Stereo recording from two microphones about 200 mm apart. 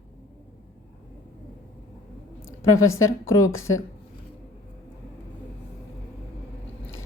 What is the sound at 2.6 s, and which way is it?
A woman's voice, 90° left.